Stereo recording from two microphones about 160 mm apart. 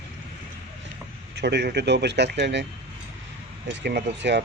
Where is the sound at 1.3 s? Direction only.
90° right.